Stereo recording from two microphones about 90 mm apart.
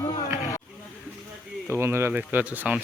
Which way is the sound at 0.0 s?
35° left (ahead or behind).